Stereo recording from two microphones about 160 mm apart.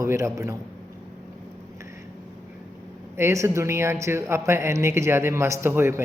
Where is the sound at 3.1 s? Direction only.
20° right (ahead or behind).